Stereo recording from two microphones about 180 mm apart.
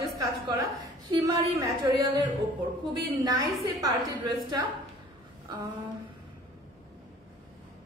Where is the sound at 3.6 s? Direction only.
20° right (ahead or behind).